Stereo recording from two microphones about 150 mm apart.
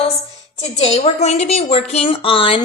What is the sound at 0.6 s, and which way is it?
A woman's voice, 45° left (ahead or behind).